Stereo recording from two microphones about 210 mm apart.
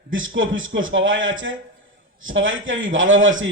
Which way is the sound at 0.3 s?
65° right (ahead or behind).